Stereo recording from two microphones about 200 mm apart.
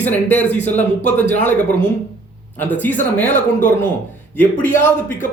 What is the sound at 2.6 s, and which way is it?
Speech, 10° left (ahead or behind).